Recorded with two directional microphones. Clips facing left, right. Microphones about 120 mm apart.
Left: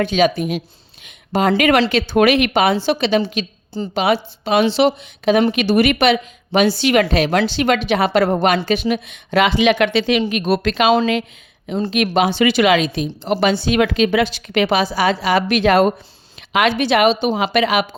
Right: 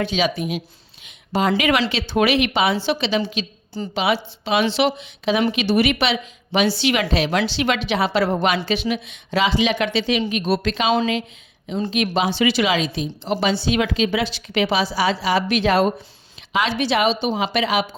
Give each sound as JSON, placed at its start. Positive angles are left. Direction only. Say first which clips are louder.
{"t": 0.0, "sound": "a woman's voice", "louder": "left 5 dB", "side_deg": 50}
{"t": 4.9, "sound": "a woman's voice", "louder": "left 5 dB", "side_deg": 50}